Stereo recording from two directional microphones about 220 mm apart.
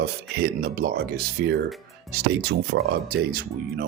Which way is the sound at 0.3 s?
45° right (ahead or behind).